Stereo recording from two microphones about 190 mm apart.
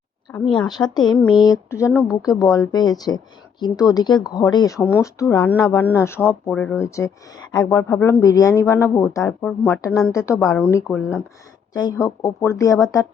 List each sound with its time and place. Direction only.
0.5 s speech: 25° left (ahead or behind)